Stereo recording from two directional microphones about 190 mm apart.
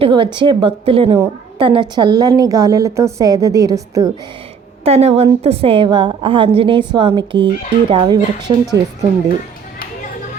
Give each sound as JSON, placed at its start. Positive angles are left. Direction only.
{"t": 0.0, "sound": "a woman's voice", "side_deg": -25}
{"t": 4.9, "sound": "a woman's voice", "side_deg": -35}